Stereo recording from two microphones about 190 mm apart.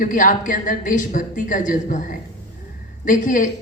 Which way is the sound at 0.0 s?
45° left (ahead or behind).